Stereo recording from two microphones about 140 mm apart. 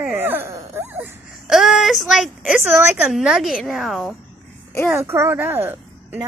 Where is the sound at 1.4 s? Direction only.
5° right (ahead or behind).